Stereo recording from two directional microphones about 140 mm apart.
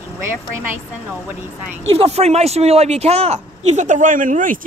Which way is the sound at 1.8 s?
45° right (ahead or behind).